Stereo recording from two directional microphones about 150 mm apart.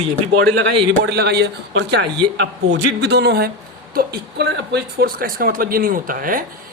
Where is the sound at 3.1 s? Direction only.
90° right; by 6.4 s 65° right (ahead or behind).